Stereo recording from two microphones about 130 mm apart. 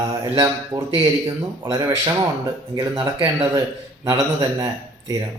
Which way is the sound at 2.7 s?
40° right (ahead or behind).